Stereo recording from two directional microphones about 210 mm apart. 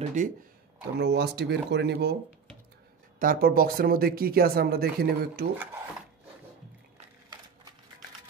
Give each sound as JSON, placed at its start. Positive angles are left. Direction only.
{"t": 0.0, "sound": "speech", "side_deg": -35}
{"t": 0.9, "sound": "speech", "side_deg": -50}
{"t": 3.2, "sound": "speech", "side_deg": -45}